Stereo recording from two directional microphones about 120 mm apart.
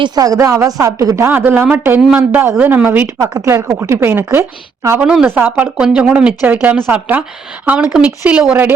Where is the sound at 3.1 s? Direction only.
30° right (ahead or behind).